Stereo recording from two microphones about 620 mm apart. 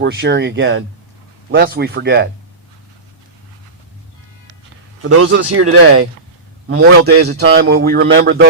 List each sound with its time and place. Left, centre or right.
0.0 s a man's voice: centre
5.0 s a man's voice: right